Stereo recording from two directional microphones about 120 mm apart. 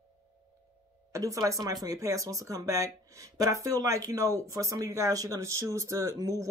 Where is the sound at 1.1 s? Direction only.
30° right (ahead or behind).